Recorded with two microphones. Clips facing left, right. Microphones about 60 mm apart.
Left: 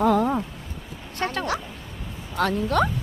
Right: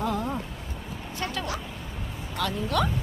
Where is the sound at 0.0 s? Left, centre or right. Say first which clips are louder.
Left 9 dB; left.